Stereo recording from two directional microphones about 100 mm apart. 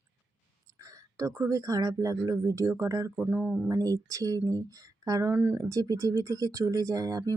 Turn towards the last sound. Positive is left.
turn(degrees=-35)  # may be behind; listen again after turning